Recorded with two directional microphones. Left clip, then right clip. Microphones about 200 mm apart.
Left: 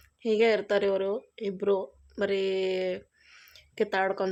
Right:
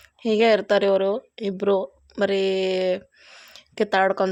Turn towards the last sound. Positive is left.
turn(degrees=-25)  # may be behind; listen again after turning